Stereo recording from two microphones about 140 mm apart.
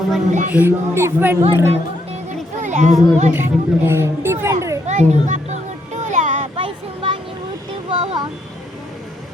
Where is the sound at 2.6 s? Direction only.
60° right (ahead or behind).